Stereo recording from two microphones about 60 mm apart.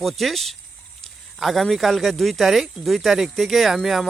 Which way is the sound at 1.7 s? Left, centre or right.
Centre.